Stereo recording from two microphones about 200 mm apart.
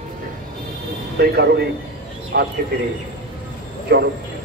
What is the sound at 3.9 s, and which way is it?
Speech, 55° right (ahead or behind).